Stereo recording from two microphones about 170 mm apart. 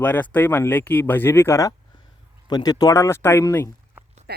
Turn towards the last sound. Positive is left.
turn(degrees=-70)  # may be behind; listen again after turning